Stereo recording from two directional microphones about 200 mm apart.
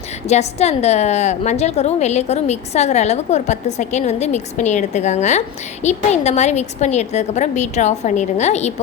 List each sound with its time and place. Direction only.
0.3 s a woman's voice: 35° left (ahead or behind)